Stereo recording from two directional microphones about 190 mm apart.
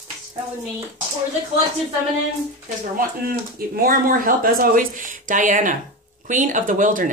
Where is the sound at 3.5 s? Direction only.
50° right (ahead or behind).